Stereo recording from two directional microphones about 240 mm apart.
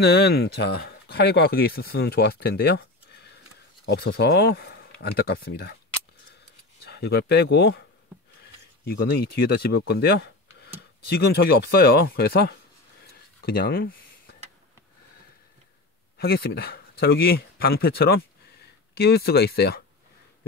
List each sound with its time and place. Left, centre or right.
0.0 s speech: left
6.9 s speech: left
8.8 s speech: left
13.4 s a sound: left
16.2 s speech: left